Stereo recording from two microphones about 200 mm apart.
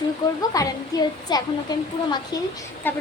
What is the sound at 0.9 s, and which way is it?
Speech, 20° left (ahead or behind).